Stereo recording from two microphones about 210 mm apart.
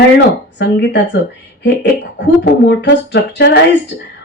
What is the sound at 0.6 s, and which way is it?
Speech, 55° left (ahead or behind).